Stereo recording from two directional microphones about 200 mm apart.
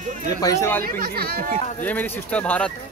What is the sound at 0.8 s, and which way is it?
Speech, 45° right (ahead or behind).